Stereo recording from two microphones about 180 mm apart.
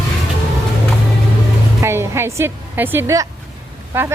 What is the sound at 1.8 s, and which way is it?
A woman's voice, 15° right (ahead or behind).